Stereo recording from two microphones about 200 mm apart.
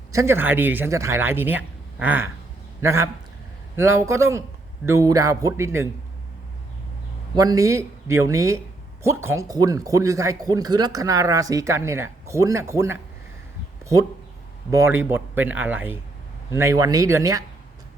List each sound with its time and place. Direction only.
0.1 s speech: 15° right (ahead or behind)
7.3 s speech: 15° right (ahead or behind)
14.7 s speech: 15° right (ahead or behind)